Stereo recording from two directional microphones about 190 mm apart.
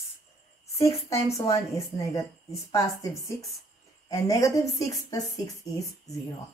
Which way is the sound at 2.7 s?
15° left (ahead or behind).